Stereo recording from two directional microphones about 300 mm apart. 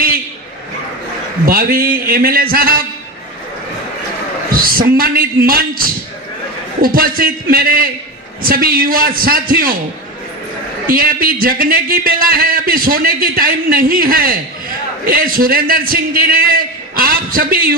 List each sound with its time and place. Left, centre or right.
1.4 s a man's voice: right
4.5 s a man's voice: right
10.9 s a man's voice: right